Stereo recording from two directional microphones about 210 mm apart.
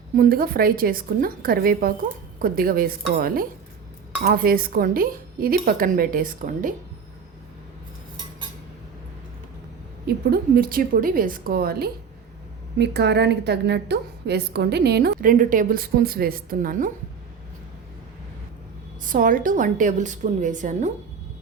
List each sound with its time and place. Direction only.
0.2 s a woman's voice: 45° right (ahead or behind)
10.2 s a woman's voice: 45° right (ahead or behind)
19.0 s a woman's voice: 40° right (ahead or behind)